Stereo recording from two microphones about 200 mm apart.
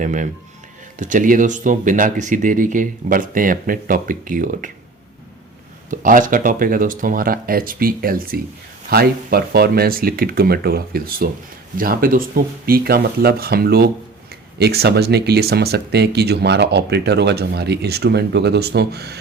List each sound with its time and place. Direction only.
0.0 s speech: 40° right (ahead or behind)
5.9 s speech: 40° right (ahead or behind)